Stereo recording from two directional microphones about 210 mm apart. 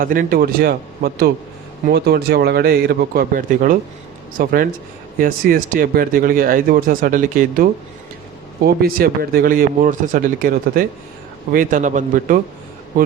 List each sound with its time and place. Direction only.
0.0 s speech: 40° right (ahead or behind)